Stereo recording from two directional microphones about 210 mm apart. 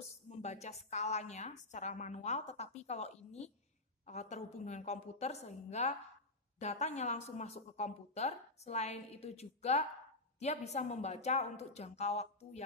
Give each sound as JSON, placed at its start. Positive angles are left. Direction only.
{"t": 0.4, "sound": "a woman's voice", "side_deg": 30}